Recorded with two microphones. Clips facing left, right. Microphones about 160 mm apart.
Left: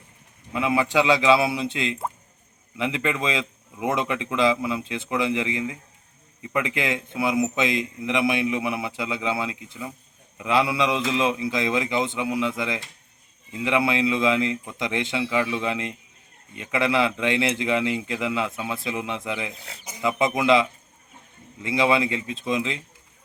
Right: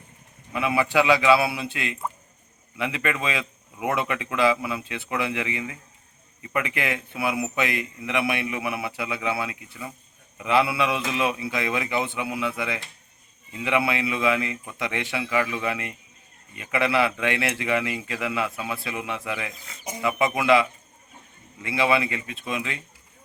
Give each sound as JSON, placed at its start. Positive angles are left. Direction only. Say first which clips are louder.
{"t": 0.5, "sound": "a man's voice", "louder": "left 1 dB", "side_deg": 15}
{"t": 17.5, "sound": "speech", "louder": "left 2 dB", "side_deg": 20}
{"t": 19.5, "sound": "speech", "louder": "left 3 dB", "side_deg": 65}
{"t": 20.0, "sound": "a man's voice", "louder": "left 1 dB", "side_deg": 15}
{"t": 21.7, "sound": "a man's voice", "louder": "left 2 dB", "side_deg": 15}